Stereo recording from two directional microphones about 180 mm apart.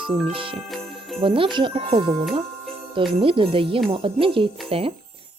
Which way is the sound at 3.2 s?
30° right (ahead or behind).